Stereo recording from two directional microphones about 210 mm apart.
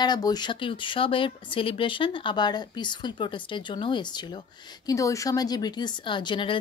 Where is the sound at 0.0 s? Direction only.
20° left (ahead or behind).